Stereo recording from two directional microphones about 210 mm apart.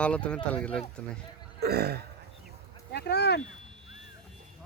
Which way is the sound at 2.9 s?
50° left (ahead or behind).